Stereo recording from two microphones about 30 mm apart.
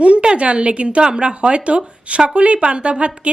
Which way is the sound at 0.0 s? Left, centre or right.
Right.